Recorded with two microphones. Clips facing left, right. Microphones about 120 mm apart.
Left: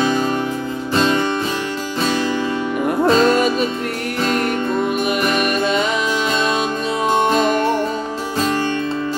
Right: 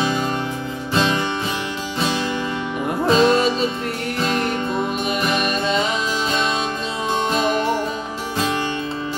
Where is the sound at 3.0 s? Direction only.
50° left (ahead or behind).